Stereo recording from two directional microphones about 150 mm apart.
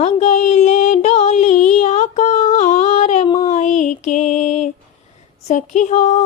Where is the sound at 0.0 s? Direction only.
50° left (ahead or behind).